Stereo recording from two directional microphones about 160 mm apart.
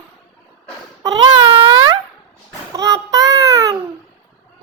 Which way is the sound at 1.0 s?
25° right (ahead or behind).